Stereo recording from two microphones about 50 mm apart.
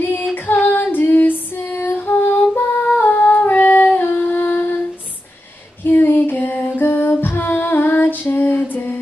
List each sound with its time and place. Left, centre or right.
0.0 s female singing: left
3.0 s a sound: left
5.9 s music: left